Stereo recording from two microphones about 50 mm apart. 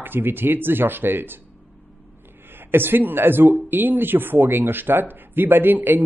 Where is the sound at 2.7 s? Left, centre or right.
Right.